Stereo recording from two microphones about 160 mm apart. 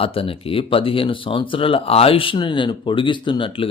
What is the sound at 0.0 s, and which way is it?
Speech, 35° left (ahead or behind).